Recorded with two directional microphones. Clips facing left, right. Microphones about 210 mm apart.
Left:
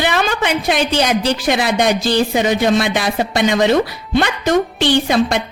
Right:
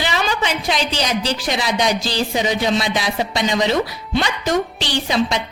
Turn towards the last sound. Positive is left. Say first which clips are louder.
# left 5 dB
turn(degrees=55)  # may be behind; listen again after turning